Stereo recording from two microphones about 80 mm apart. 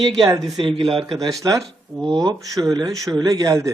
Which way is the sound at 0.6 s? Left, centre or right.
Right.